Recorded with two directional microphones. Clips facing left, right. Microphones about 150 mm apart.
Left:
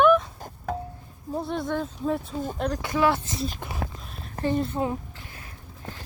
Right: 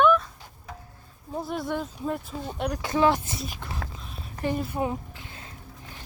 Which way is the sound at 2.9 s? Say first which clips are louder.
Right 1 dB; 20° right (ahead or behind).